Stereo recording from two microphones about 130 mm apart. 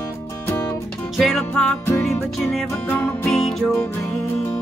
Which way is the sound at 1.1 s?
Centre (ahead or behind).